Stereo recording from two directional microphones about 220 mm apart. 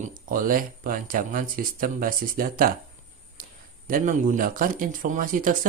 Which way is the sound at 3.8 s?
40° right (ahead or behind).